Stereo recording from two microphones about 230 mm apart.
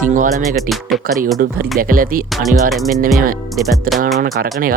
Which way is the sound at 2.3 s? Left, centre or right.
Centre.